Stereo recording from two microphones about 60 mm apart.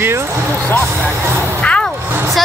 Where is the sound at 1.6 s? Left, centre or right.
Left.